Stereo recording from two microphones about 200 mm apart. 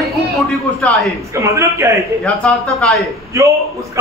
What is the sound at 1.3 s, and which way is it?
Speech, 15° right (ahead or behind).